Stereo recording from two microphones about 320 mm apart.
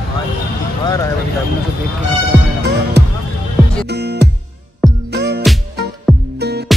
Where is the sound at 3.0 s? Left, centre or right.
Right.